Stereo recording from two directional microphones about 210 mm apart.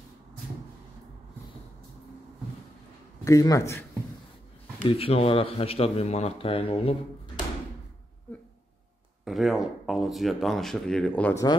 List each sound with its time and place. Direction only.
3.3 s a man's voice: 15° left (ahead or behind)
4.7 s speech: 25° left (ahead or behind)
9.2 s speech: centre (ahead or behind)